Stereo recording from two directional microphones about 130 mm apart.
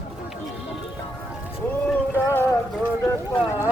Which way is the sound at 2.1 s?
15° left (ahead or behind).